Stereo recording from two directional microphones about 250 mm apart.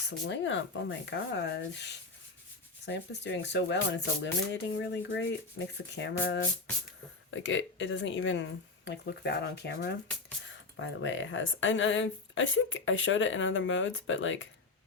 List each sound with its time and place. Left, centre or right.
0.1 s speech: left